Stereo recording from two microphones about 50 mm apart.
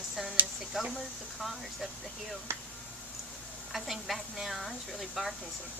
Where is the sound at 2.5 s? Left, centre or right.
Right.